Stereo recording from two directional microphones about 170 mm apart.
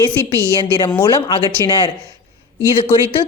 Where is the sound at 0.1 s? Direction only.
15° right (ahead or behind).